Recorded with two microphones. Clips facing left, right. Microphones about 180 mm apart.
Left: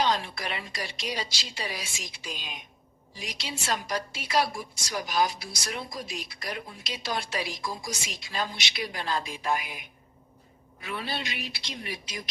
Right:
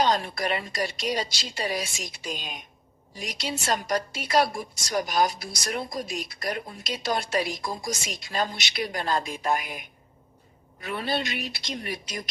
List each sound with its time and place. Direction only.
0.0 s a woman's voice: 45° right (ahead or behind)